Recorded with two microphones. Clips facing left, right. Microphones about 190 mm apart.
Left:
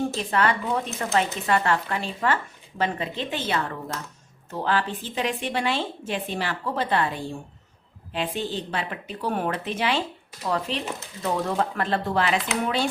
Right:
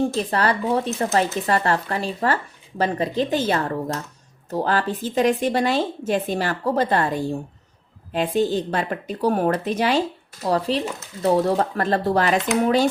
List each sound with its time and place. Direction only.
0.2 s a woman's voice: 35° right (ahead or behind)